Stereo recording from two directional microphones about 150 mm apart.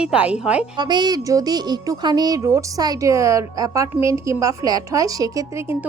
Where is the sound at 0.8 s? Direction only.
30° right (ahead or behind).